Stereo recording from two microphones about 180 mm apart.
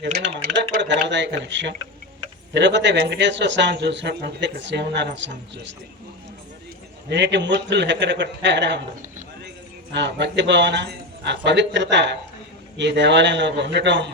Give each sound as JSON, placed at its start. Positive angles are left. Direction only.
{"t": 0.0, "sound": "speech", "side_deg": -75}
{"t": 7.1, "sound": "speech", "side_deg": -75}
{"t": 9.9, "sound": "speech", "side_deg": -75}